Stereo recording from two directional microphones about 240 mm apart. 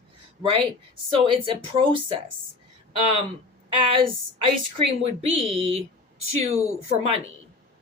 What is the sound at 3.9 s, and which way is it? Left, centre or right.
Speech, right.